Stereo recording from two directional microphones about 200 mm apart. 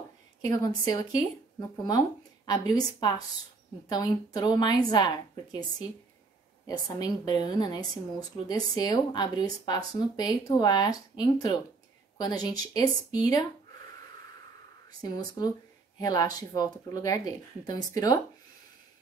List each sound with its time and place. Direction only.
0.5 s speech: 20° left (ahead or behind)
7.0 s speech: 20° left (ahead or behind)
14.9 s speech: 20° left (ahead or behind)